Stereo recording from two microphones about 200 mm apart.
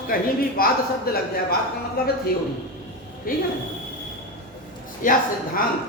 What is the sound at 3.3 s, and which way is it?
Speech, 45° left (ahead or behind).